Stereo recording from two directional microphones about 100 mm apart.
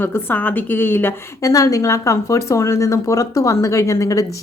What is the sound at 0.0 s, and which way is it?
Speech, 20° left (ahead or behind).